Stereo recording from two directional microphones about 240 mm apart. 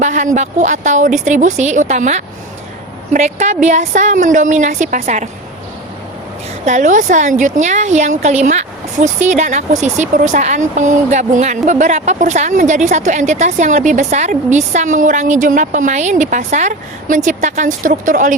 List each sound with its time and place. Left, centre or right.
0.0 s a woman's voice: right
6.7 s a woman's voice: right